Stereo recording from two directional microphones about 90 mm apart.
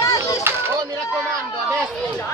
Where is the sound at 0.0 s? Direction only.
40° left (ahead or behind).